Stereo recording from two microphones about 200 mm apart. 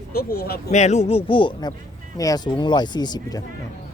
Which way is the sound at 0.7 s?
35° left (ahead or behind).